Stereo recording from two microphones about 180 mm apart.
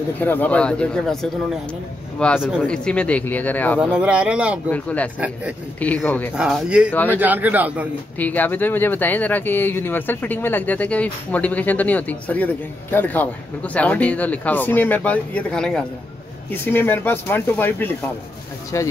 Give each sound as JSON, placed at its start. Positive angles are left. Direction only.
{"t": 0.2, "sound": "speech", "side_deg": 10}
{"t": 3.8, "sound": "speech", "side_deg": -5}
{"t": 4.6, "sound": "speech", "side_deg": 10}
{"t": 6.3, "sound": "speech", "side_deg": -5}
{"t": 6.9, "sound": "speech", "side_deg": 10}
{"t": 7.2, "sound": "speech", "side_deg": -10}
{"t": 8.2, "sound": "speech", "side_deg": 10}